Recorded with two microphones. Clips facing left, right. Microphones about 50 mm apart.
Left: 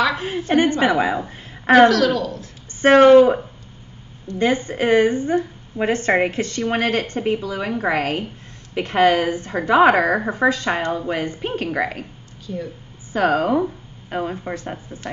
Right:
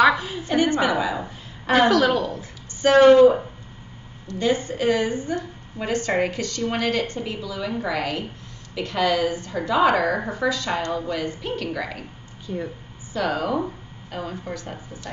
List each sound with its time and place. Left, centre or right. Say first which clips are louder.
0.2 s a woman's voice: left 4 dB; left
1.9 s a woman's voice: left 1 dB; right
2.8 s a woman's voice: left 3 dB; left
4.3 s a woman's voice: left 3 dB; left
12.5 s speech: left 1 dB; centre
13.1 s a woman's voice: left 6 dB; left